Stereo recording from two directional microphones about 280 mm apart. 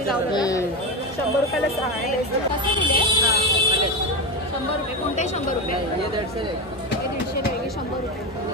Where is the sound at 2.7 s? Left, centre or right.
Centre.